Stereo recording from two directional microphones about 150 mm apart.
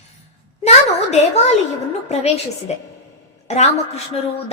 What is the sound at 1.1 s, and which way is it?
Speech, 45° left (ahead or behind).